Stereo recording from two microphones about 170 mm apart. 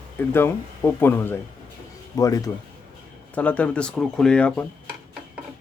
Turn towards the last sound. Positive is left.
turn(degrees=5)  # may be behind; listen again after turning